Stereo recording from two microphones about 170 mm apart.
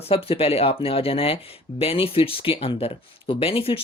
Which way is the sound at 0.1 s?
35° left (ahead or behind).